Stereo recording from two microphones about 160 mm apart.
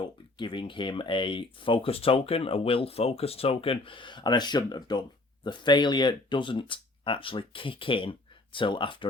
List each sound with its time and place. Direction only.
0.0 s speech: 30° left (ahead or behind)